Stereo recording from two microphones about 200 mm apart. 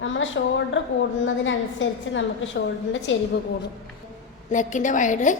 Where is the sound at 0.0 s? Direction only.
70° left (ahead or behind).